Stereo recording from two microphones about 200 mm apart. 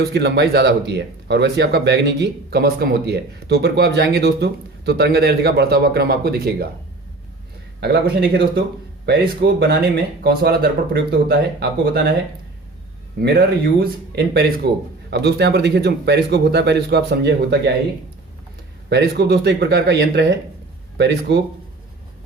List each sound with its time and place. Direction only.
0.0 s speech: 55° right (ahead or behind)
7.8 s speech: 55° right (ahead or behind)
13.1 s speech: 50° right (ahead or behind)
18.9 s speech: 55° right (ahead or behind)